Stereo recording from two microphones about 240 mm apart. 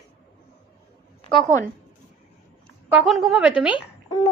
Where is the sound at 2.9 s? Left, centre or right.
Centre.